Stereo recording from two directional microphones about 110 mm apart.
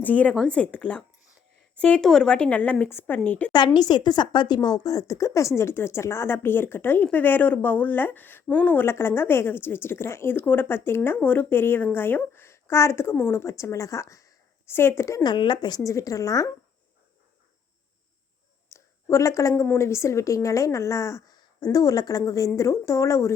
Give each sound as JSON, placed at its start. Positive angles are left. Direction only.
{"t": 0.0, "sound": "a woman's voice", "side_deg": 15}
{"t": 3.8, "sound": "a woman's voice", "side_deg": 40}
{"t": 15.2, "sound": "speech", "side_deg": 45}
{"t": 15.8, "sound": "speech", "side_deg": 30}
{"t": 18.7, "sound": "a sound", "side_deg": 25}
{"t": 19.6, "sound": "a woman's voice", "side_deg": 25}